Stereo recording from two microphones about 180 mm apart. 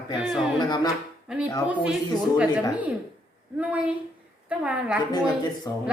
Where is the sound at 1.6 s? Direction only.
5° right (ahead or behind).